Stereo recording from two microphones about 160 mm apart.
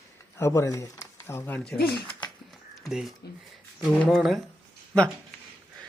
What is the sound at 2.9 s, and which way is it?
A man's voice, 5° right (ahead or behind).